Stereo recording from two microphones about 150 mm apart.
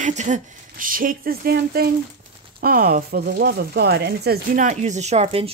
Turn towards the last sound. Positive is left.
turn(degrees=-45)  # may be behind; listen again after turning